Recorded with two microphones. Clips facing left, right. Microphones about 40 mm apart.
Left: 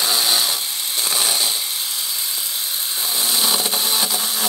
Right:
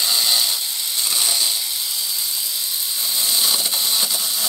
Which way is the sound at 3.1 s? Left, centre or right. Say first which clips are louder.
Left 1 dB; left.